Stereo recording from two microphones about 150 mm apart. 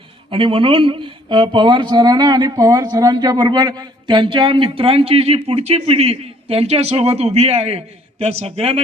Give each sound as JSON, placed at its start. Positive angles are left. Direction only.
{"t": 0.3, "sound": "speech", "side_deg": -35}